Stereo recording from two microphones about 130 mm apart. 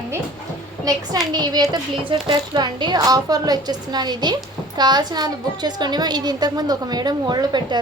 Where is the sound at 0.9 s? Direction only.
30° right (ahead or behind).